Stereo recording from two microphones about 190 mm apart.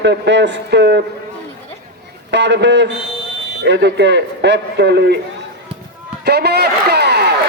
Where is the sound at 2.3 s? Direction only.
70° right (ahead or behind).